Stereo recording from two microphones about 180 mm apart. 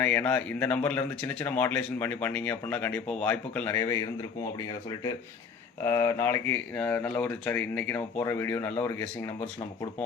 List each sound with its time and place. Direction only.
0.0 s speech: 10° left (ahead or behind)